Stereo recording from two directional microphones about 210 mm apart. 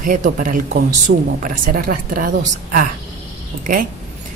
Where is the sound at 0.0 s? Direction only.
40° right (ahead or behind).